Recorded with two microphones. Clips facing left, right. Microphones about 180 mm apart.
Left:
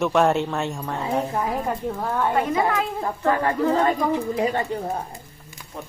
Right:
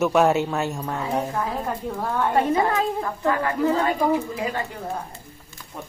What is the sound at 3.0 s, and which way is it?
A woman's voice, 30° left (ahead or behind).